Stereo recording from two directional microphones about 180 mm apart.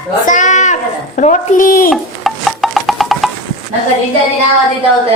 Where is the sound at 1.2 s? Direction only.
45° left (ahead or behind).